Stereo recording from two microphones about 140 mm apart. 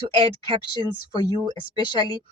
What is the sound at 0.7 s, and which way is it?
Speech, 30° left (ahead or behind).